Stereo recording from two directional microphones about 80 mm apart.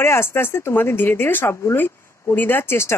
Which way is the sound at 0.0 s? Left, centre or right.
Left.